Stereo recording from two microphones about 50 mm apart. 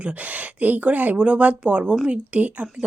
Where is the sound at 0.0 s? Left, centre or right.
Right.